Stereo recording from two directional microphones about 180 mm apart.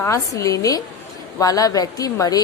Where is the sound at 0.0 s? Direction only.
15° left (ahead or behind).